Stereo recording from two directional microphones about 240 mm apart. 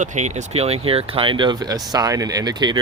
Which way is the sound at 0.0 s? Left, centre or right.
Right.